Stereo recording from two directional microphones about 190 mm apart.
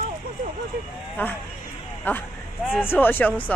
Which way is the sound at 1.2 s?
10° left (ahead or behind).